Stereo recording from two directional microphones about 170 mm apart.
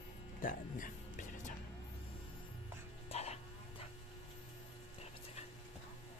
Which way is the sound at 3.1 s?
40° left (ahead or behind).